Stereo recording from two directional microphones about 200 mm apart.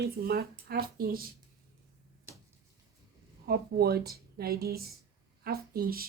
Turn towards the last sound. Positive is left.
turn(degrees=-50)  # may be behind; listen again after turning